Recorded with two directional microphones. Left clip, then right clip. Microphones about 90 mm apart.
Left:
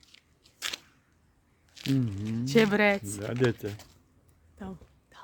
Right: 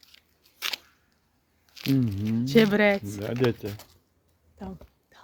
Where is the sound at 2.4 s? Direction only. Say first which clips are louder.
Right 2 dB; 10° left (ahead or behind).